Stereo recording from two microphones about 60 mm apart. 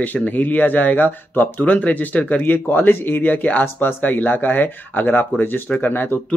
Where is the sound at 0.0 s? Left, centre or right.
Left.